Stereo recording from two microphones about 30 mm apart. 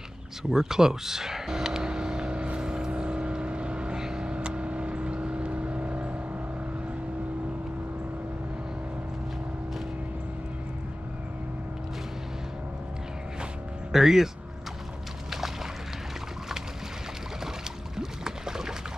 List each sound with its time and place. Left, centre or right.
0.4 s vehicle: centre; by 3.9 s right
3.9 s vehicle: right
13.9 s speech: centre
17.9 s a sound: centre